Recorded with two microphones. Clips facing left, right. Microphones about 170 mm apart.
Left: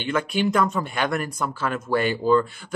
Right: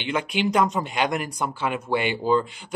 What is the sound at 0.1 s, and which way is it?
Speech, 15° right (ahead or behind).